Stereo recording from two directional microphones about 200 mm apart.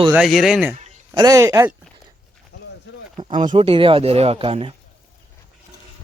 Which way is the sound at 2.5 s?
60° left (ahead or behind).